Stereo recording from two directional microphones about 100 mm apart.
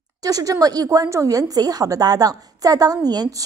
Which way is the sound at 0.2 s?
35° right (ahead or behind).